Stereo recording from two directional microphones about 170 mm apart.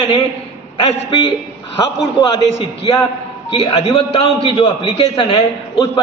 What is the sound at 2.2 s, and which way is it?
A man's voice, 25° left (ahead or behind).